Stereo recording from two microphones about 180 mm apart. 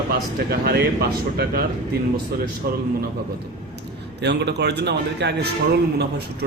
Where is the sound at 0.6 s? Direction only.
60° right (ahead or behind).